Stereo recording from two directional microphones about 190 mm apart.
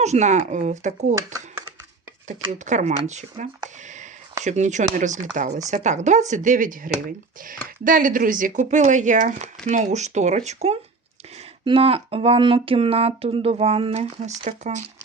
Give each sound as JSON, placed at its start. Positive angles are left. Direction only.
{"t": 0.0, "sound": "speech", "side_deg": -40}
{"t": 2.5, "sound": "speech", "side_deg": -40}